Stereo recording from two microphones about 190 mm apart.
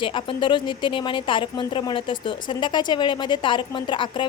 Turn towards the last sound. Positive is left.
turn(degrees=25)  # may be behind; listen again after turning